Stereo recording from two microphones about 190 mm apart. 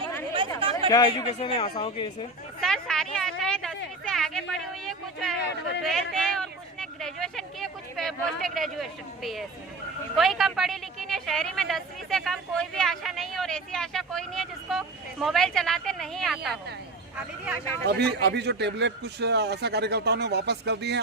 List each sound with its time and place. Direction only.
0.3 s chatter: 30° right (ahead or behind)
0.9 s speech: 20° left (ahead or behind)
1.4 s speech: 30° left (ahead or behind)
2.6 s a sound: 5° left (ahead or behind)
10.2 s a woman's voice: centre (ahead or behind)
17.8 s a man's voice: 60° right (ahead or behind)